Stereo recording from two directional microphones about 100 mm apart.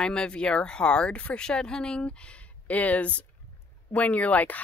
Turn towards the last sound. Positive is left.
turn(degrees=15)  # may be behind; listen again after turning